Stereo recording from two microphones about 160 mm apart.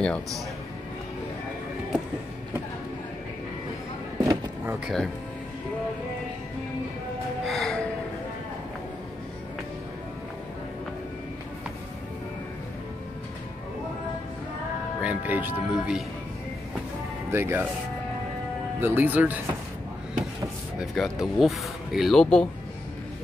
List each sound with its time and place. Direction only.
4.2 s a sound: 20° right (ahead or behind)
4.7 s speech: centre (ahead or behind)
7.4 s music: centre (ahead or behind)
15.0 s speech: 10° right (ahead or behind)
17.3 s speech: 15° right (ahead or behind)
18.8 s speech: 15° right (ahead or behind)
20.8 s speech: centre (ahead or behind)